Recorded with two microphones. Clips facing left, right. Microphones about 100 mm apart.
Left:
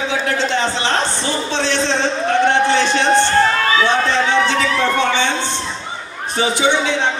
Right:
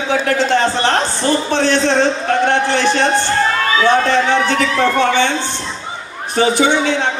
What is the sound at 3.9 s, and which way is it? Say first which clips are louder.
A man's voice: right 3 dB; 50° right (ahead or behind).